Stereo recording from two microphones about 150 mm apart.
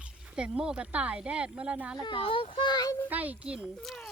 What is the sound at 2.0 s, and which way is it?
Speech, 35° left (ahead or behind).